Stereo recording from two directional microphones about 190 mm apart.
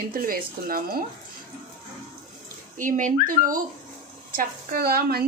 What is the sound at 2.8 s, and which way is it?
Speech, 45° right (ahead or behind).